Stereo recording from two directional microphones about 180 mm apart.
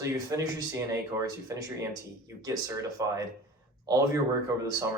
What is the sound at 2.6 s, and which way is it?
Speech, 20° right (ahead or behind).